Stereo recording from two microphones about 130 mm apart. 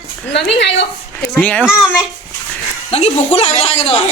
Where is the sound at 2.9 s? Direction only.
55° left (ahead or behind).